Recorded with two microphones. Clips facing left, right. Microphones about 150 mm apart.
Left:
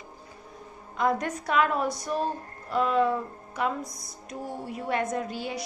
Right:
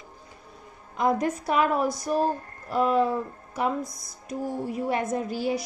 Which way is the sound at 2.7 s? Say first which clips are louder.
Right 2 dB; 35° right (ahead or behind).